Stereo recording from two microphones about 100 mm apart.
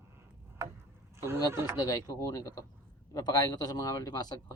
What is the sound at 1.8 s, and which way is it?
A man's voice, 35° left (ahead or behind).